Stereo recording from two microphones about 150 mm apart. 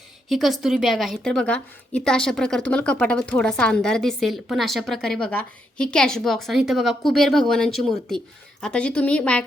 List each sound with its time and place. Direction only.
0.3 s a woman's voice: centre (ahead or behind)